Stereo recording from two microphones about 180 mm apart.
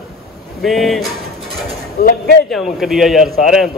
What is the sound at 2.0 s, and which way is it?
Speech, 45° left (ahead or behind).